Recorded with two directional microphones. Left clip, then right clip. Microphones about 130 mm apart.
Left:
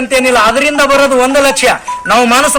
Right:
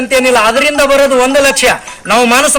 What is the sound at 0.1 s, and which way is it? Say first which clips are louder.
Speech: even; 35° right (ahead or behind).